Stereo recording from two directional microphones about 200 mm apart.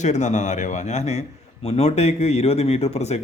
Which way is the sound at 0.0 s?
35° left (ahead or behind).